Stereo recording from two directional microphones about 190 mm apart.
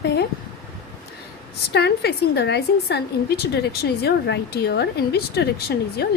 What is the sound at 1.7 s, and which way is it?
A woman's voice, 60° left (ahead or behind).